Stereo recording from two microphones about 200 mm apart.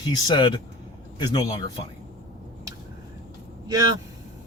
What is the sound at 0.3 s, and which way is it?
Speech, 20° left (ahead or behind).